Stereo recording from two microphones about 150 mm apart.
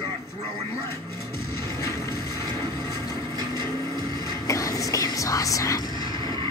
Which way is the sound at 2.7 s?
25° left (ahead or behind).